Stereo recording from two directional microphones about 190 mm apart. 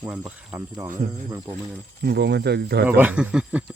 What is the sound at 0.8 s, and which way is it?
Speech, 45° right (ahead or behind).